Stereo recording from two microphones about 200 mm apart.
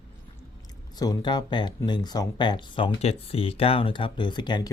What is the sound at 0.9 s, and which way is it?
Speech, 20° left (ahead or behind).